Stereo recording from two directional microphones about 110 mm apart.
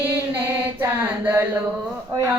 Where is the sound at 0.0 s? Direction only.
20° right (ahead or behind).